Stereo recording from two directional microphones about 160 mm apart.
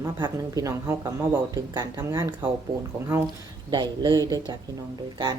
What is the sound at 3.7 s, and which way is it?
Speech, 25° right (ahead or behind).